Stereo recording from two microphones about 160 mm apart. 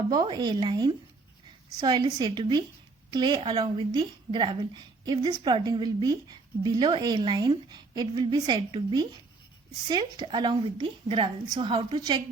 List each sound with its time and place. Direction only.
0.1 s a woman's voice: 25° right (ahead or behind)